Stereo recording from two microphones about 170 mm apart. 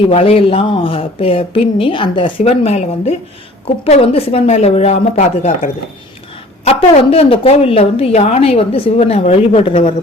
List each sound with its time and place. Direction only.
0.0 s a woman's voice: 35° left (ahead or behind)
5.1 s speech: 50° left (ahead or behind)
6.7 s a woman's voice: 35° left (ahead or behind)